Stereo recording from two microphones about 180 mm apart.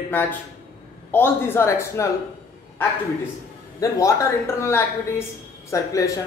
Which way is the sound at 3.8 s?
15° left (ahead or behind).